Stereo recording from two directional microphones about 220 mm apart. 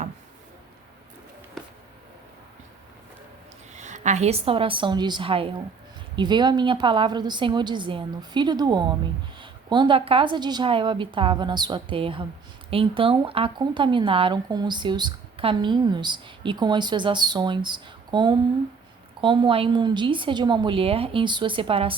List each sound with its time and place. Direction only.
3.8 s speech: 35° right (ahead or behind)